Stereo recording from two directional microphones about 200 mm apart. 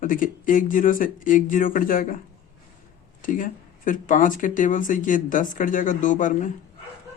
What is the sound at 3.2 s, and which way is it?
Speech, 40° left (ahead or behind).